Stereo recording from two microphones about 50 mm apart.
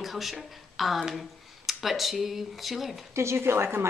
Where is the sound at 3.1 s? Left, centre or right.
Right.